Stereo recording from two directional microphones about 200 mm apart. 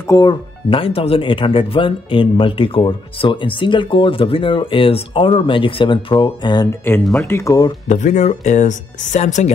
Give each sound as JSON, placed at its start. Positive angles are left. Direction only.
{"t": 0.0, "sound": "speech", "side_deg": 15}
{"t": 7.9, "sound": "speech", "side_deg": 35}